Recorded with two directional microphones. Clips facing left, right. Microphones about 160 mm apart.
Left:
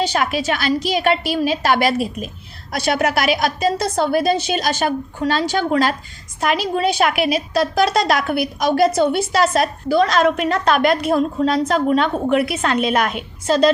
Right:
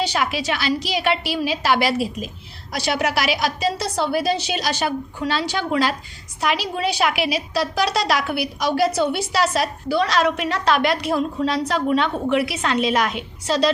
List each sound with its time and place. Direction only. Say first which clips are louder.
0.0 s a woman's voice: left 3 dB; 45° left (ahead or behind)